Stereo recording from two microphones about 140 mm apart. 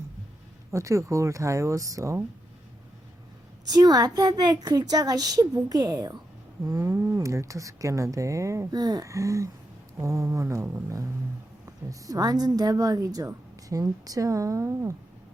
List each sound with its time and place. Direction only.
0.7 s speech: 20° right (ahead or behind)
3.7 s speech: 30° right (ahead or behind)